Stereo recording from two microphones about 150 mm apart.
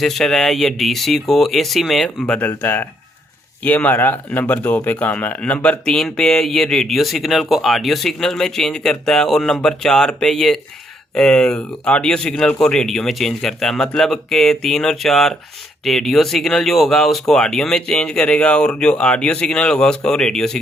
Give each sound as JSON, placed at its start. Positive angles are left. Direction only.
{"t": 0.0, "sound": "speech", "side_deg": 0}